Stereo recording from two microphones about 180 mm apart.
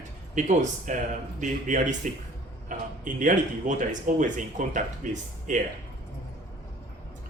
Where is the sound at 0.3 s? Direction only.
40° right (ahead or behind).